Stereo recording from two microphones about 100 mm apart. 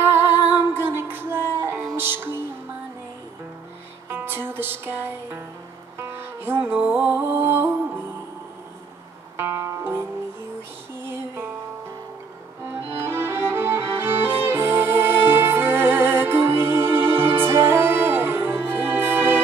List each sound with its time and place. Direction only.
0.0 s music: 25° right (ahead or behind)
4.1 s music: 20° right (ahead or behind)
9.4 s music: 30° right (ahead or behind)
12.9 s music: 25° right (ahead or behind)